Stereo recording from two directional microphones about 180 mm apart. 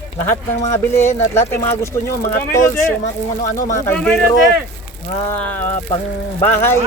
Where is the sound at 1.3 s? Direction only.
15° left (ahead or behind).